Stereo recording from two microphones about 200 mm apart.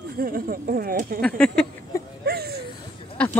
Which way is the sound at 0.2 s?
45° right (ahead or behind).